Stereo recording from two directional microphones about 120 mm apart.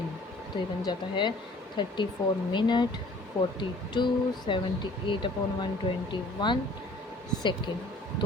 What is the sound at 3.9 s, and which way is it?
Speech, 40° left (ahead or behind).